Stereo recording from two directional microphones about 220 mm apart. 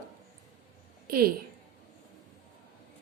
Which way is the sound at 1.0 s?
40° right (ahead or behind).